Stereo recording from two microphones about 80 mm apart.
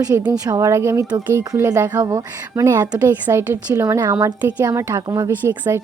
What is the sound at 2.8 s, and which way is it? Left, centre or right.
Speech, right.